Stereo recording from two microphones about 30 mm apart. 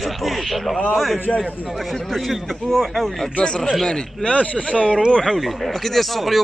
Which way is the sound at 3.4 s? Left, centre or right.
Left.